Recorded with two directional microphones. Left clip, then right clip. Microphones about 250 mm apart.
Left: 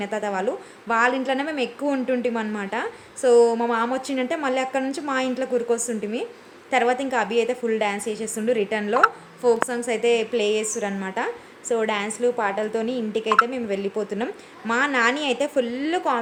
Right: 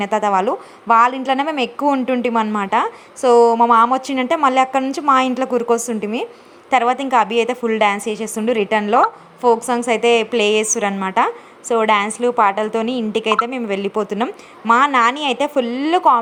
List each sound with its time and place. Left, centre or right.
0.0 s a woman's voice: centre